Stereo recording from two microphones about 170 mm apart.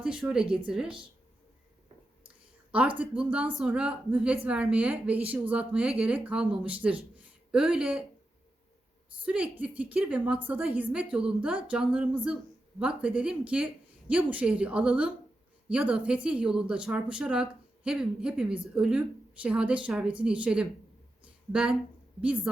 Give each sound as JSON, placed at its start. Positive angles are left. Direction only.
{"t": 0.0, "sound": "speech", "side_deg": -5}
{"t": 3.0, "sound": "a woman's voice", "side_deg": -5}
{"t": 9.2, "sound": "a woman's voice", "side_deg": -10}